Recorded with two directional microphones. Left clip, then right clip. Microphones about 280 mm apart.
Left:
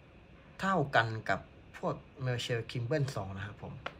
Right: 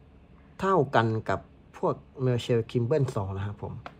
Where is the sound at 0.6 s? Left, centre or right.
Centre.